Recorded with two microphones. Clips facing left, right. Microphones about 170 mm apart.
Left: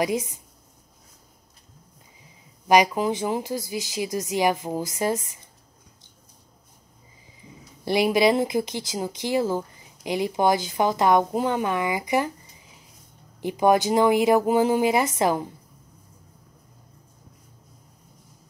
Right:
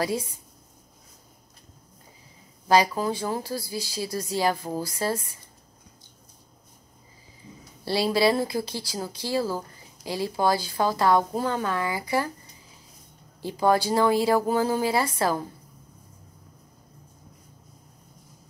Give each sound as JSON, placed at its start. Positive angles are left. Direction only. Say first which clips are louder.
{"t": 0.0, "sound": "speech", "louder": "left 3 dB", "side_deg": 20}
{"t": 2.7, "sound": "speech", "louder": "left 2 dB", "side_deg": 15}
{"t": 7.8, "sound": "speech", "louder": "left 3 dB", "side_deg": 20}
{"t": 13.4, "sound": "speech", "louder": "left 3 dB", "side_deg": 20}